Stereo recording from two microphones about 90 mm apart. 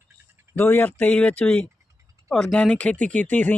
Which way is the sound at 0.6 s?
20° left (ahead or behind).